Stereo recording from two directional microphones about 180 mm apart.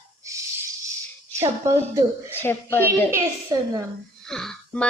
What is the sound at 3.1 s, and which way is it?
Speech, 15° right (ahead or behind).